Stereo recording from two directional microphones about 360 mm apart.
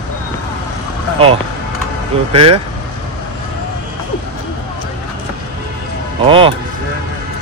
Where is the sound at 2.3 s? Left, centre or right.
Centre.